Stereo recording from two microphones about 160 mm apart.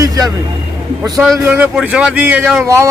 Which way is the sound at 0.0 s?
20° right (ahead or behind).